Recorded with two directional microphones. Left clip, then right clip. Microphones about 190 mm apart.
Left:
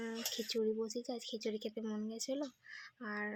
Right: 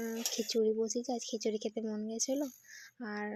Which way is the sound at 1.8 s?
10° right (ahead or behind).